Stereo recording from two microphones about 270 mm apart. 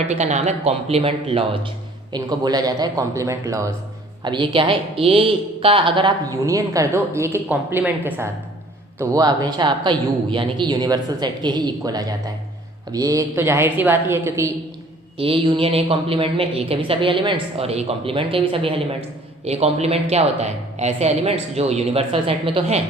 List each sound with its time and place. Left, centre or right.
0.1 s a woman's voice: right; by 14.5 s centre
15.2 s a woman's voice: centre